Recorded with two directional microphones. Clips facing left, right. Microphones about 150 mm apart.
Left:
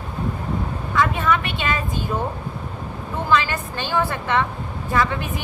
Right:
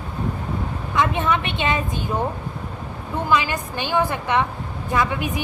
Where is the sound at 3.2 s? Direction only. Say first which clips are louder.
Left 1 dB; 15° right (ahead or behind).